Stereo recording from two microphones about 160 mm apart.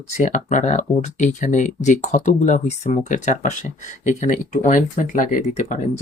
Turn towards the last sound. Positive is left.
turn(degrees=50)  # may be behind; listen again after turning